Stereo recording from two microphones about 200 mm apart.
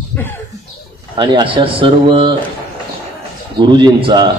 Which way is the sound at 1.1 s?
25° right (ahead or behind).